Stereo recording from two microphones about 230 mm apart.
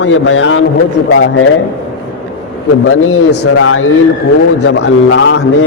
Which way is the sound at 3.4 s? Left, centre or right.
Left.